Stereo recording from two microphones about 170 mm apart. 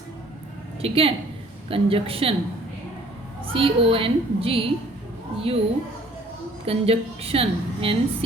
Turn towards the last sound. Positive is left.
turn(degrees=-35)  # may be behind; listen again after turning